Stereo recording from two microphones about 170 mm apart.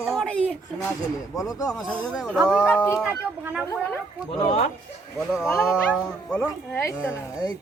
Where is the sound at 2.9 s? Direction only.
10° right (ahead or behind).